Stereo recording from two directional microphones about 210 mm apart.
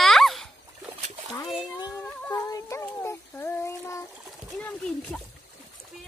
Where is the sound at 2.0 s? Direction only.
10° left (ahead or behind).